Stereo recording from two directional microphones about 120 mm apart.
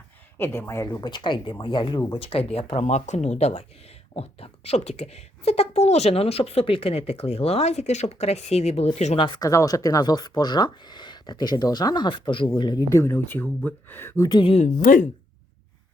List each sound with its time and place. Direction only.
0.3 s speech: 20° left (ahead or behind)
1.0 s a woman's voice: 40° left (ahead or behind); by 8.9 s 60° left (ahead or behind)
9.1 s speech: 45° left (ahead or behind)
9.5 s speech: 25° left (ahead or behind)
12.9 s speech: 20° left (ahead or behind)
14.3 s speech: 40° left (ahead or behind)
14.5 s speech: 75° left (ahead or behind)